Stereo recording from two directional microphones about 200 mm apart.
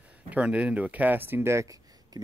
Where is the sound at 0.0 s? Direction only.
5° right (ahead or behind).